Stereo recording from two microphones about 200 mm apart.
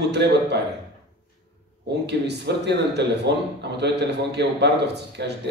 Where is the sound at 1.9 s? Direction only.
55° right (ahead or behind).